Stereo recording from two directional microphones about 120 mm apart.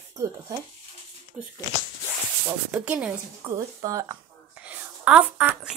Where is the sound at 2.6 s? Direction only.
10° right (ahead or behind).